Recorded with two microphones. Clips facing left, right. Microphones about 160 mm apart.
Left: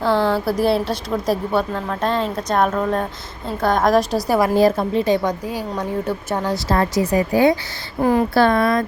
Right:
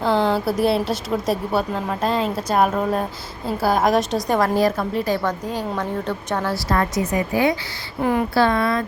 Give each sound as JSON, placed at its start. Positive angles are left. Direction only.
{"t": 0.0, "sound": "a woman's voice", "side_deg": 0}
{"t": 4.5, "sound": "a woman's voice", "side_deg": 25}
{"t": 5.5, "sound": "a woman's voice", "side_deg": 10}
{"t": 6.7, "sound": "a woman's voice", "side_deg": 30}